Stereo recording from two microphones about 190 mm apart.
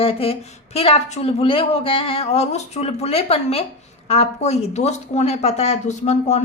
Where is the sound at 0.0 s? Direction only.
30° left (ahead or behind).